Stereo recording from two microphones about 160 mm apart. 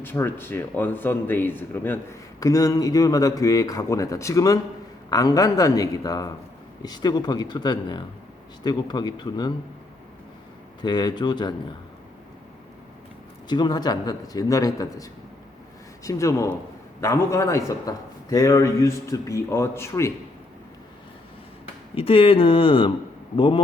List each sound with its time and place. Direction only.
0.0 s speech: 15° left (ahead or behind)
10.8 s speech: 25° left (ahead or behind)
13.5 s speech: 25° left (ahead or behind)
21.9 s speech: 35° left (ahead or behind)